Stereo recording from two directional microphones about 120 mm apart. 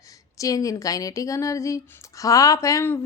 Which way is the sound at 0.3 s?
30° left (ahead or behind).